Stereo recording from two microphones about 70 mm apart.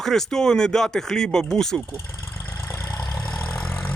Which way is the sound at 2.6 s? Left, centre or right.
Left.